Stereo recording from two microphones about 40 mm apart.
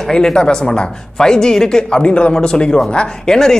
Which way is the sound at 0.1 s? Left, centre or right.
Centre.